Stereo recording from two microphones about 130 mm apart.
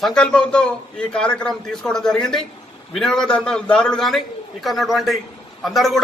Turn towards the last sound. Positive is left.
turn(degrees=0)  # may be behind; listen again after turning